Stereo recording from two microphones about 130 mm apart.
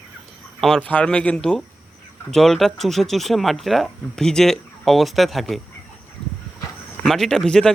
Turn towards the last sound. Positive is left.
turn(degrees=5)  # may be behind; listen again after turning